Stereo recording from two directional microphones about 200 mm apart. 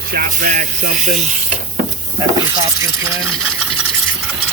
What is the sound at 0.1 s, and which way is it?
Speech, 45° right (ahead or behind).